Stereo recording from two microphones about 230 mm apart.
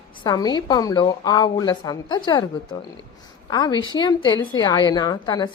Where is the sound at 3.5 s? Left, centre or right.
Centre.